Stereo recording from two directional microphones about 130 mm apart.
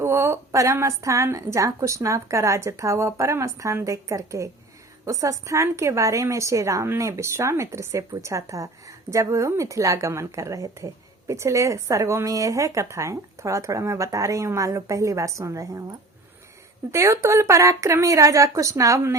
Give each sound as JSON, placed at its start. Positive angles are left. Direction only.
{"t": 0.0, "sound": "a woman's voice", "side_deg": -20}
{"t": 16.9, "sound": "a woman's voice", "side_deg": -20}